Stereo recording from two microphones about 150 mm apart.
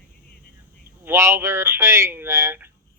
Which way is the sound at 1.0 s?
15° right (ahead or behind).